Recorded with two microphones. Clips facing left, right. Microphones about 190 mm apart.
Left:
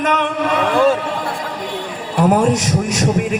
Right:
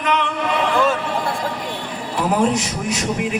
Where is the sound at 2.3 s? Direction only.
45° left (ahead or behind).